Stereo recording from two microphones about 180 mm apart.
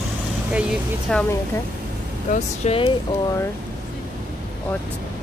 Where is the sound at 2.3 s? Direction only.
35° left (ahead or behind).